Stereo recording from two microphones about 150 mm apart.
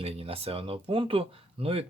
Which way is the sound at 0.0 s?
40° right (ahead or behind).